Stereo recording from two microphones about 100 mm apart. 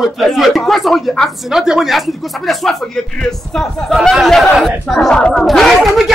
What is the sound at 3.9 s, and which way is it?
Speech, centre (ahead or behind).